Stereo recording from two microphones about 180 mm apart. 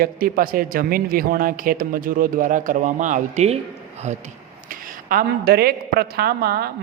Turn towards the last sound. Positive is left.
turn(degrees=-60)  # may be behind; listen again after turning